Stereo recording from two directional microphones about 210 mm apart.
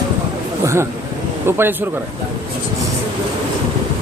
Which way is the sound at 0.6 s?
15° right (ahead or behind).